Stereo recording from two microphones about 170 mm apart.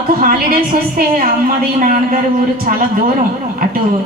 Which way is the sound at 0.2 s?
55° right (ahead or behind).